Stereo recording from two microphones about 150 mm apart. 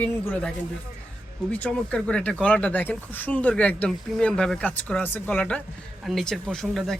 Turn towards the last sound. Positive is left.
turn(degrees=0)  # may be behind; listen again after turning